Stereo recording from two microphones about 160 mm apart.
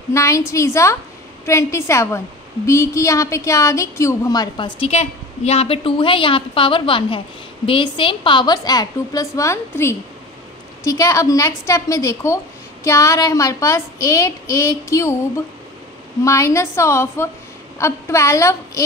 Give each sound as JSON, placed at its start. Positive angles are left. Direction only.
{"t": 0.1, "sound": "a woman's voice", "side_deg": 20}
{"t": 16.3, "sound": "a woman's voice", "side_deg": 20}